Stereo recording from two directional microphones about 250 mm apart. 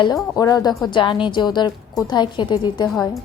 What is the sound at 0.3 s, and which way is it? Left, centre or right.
A woman's voice, centre.